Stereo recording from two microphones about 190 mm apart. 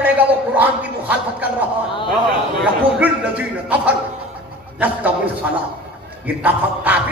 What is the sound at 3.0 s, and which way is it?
Speech, 5° right (ahead or behind).